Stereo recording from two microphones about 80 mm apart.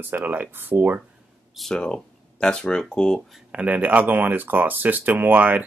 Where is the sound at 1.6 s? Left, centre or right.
Centre.